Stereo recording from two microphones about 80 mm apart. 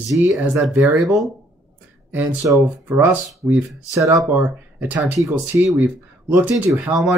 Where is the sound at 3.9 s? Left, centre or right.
Right.